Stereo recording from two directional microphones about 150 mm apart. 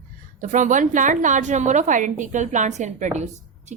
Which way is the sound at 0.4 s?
55° right (ahead or behind).